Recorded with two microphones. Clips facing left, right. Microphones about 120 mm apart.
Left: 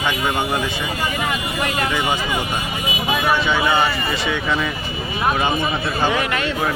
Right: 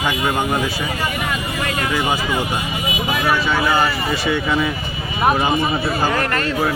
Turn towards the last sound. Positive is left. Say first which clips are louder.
# right 2 dB
turn(degrees=0)  # may be behind; listen again after turning